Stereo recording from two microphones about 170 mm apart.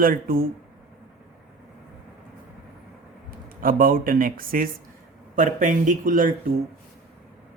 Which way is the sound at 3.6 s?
55° right (ahead or behind).